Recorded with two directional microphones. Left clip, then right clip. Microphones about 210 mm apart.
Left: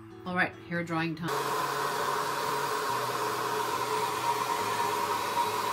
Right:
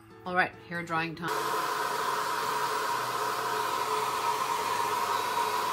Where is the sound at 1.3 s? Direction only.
10° right (ahead or behind).